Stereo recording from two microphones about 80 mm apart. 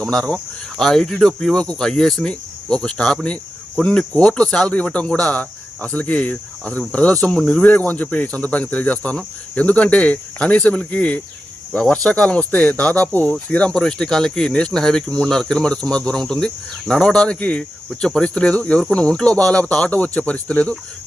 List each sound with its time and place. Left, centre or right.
0.0 s cricket: centre
7.3 s cricket: centre
7.6 s cricket: centre